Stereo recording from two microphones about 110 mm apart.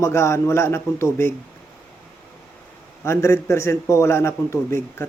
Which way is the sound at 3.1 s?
25° left (ahead or behind).